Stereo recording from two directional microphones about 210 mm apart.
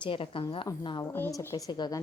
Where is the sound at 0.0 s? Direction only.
25° left (ahead or behind).